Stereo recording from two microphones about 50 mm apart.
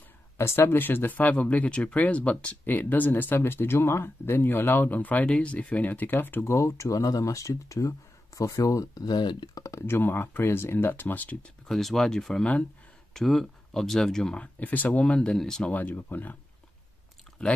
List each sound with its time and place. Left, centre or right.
0.4 s speech: left
0.7 s speech: left
2.6 s speech: left
6.4 s speech: left
9.8 s speech: left
10.9 s speech: left
11.6 s speech: centre
14.4 s speech: left
15.0 s speech: left
15.7 s speech: left